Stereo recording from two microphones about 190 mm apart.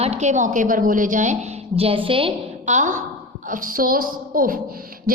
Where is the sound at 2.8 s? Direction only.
40° right (ahead or behind).